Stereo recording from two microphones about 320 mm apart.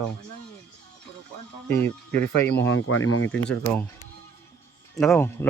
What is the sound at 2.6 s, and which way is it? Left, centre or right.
Speech, left.